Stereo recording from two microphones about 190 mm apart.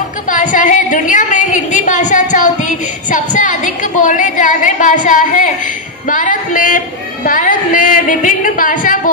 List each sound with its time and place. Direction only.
0.3 s a woman's voice: 45° left (ahead or behind)